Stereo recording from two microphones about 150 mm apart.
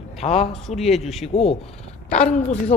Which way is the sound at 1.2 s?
45° left (ahead or behind).